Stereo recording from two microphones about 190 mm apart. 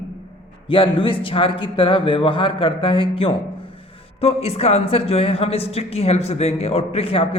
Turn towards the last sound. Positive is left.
turn(degrees=30)  # may be behind; listen again after turning